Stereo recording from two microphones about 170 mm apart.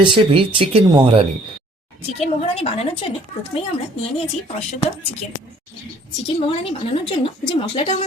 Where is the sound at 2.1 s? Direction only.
40° left (ahead or behind).